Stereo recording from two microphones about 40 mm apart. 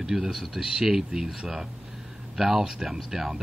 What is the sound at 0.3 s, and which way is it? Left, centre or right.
Speech, centre.